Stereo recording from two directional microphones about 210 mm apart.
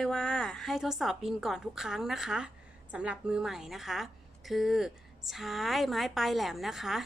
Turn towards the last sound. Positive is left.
turn(degrees=0)  # may be behind; listen again after turning